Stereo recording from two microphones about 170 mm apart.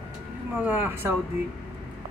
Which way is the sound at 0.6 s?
10° right (ahead or behind).